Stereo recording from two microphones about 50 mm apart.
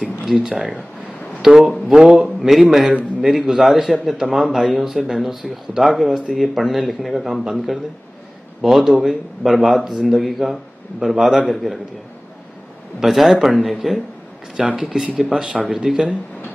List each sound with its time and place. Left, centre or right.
0.2 s speech: centre
1.4 s a sound: centre
1.9 s speech: centre
13.0 s speech: centre